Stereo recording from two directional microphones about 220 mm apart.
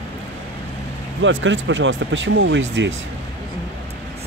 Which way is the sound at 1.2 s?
60° right (ahead or behind).